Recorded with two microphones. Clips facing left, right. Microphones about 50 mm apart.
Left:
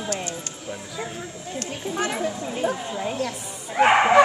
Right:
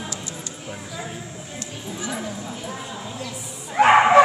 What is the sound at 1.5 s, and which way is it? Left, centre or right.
Speech, left.